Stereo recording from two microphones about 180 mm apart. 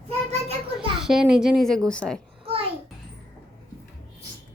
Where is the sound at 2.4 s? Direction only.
30° right (ahead or behind).